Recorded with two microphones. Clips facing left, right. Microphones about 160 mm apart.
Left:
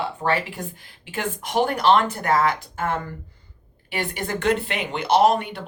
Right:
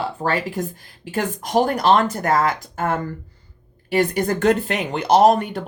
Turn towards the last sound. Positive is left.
turn(degrees=-45)  # may be behind; listen again after turning